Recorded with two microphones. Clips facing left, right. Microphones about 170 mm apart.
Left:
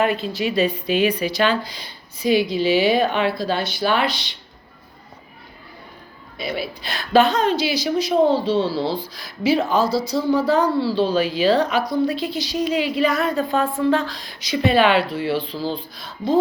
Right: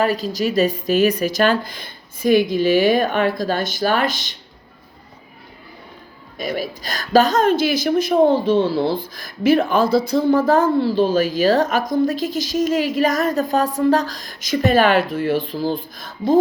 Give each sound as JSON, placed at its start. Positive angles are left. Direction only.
{"t": 0.0, "sound": "speech", "side_deg": -40}
{"t": 6.3, "sound": "speech", "side_deg": -45}